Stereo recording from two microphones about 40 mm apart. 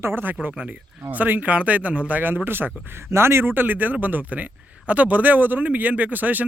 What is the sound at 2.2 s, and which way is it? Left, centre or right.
Speech, right.